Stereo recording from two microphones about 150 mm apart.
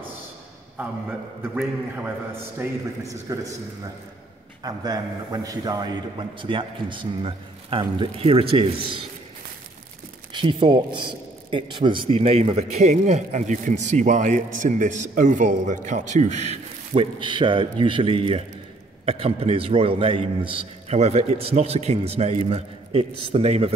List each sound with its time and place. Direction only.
1.4 s a man's voice: 15° right (ahead or behind)
4.6 s a man's voice: 25° right (ahead or behind)
10.3 s a man's voice: 30° right (ahead or behind)